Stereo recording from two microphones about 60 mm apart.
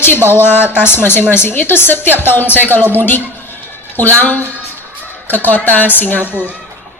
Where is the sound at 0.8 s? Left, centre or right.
Left.